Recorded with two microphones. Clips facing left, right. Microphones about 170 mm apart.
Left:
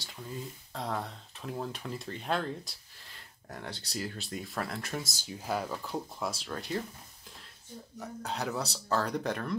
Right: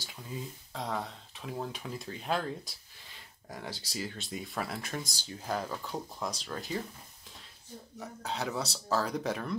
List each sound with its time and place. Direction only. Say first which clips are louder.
0.0 s speech: even; centre (ahead or behind)
8.0 s speech: even; centre (ahead or behind)